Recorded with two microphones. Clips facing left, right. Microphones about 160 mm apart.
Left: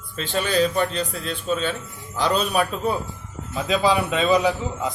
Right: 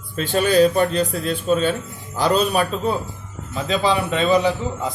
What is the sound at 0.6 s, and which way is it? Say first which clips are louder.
Speech: right 5 dB; 45° right (ahead or behind).